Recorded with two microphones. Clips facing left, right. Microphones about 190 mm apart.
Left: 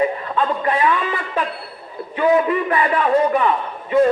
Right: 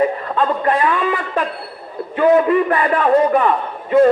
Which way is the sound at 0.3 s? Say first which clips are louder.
Right 3 dB; 40° right (ahead or behind).